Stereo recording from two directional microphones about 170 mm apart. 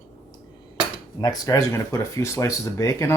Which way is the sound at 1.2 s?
20° left (ahead or behind).